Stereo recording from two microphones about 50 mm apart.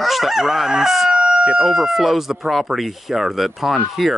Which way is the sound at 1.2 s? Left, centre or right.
Right.